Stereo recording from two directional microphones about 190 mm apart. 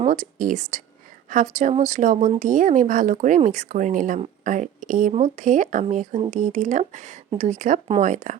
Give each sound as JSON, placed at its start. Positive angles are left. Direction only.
{"t": 0.0, "sound": "speech", "side_deg": -40}